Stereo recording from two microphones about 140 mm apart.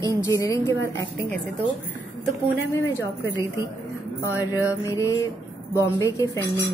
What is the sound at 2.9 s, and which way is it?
Speech, 20° left (ahead or behind).